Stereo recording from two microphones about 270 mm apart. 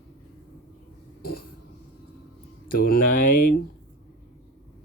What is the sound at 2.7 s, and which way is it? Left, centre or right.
Speech, left.